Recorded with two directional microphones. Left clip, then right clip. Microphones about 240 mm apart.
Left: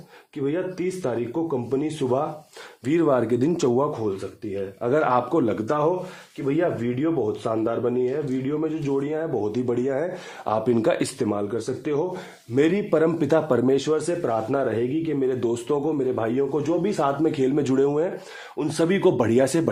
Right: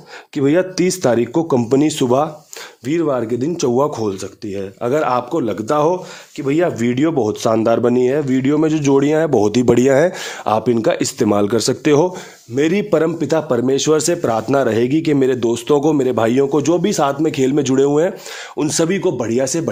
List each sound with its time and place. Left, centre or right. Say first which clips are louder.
0.3 s speech: right 11 dB; right
2.8 s speech: right 3 dB; centre
4.8 s speech: right 4 dB; right
6.4 s speech: right 7 dB; right; by 11.3 s centre
11.3 s a man's voice: right 11 dB; right
12.5 s speech: right 5 dB; right
13.9 s speech: right 7 dB; right
15.4 s a man's voice: right 9 dB; right
17.2 s a man's voice: right 6 dB; right
18.9 s speech: right 2 dB; centre